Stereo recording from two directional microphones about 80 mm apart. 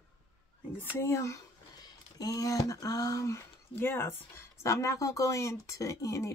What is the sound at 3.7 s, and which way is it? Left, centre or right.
Speech, left.